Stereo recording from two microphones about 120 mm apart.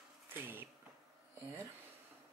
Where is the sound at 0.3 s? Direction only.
20° right (ahead or behind).